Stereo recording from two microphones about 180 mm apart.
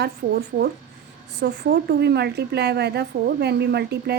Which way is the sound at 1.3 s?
65° right (ahead or behind).